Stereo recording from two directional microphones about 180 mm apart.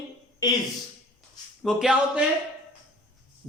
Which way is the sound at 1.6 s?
Centre (ahead or behind).